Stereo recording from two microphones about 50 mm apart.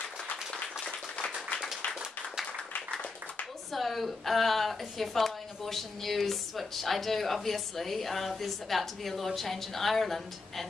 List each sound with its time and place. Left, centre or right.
1.1 s clapping: left
2.7 s a sound: left
3.7 s a woman's voice: centre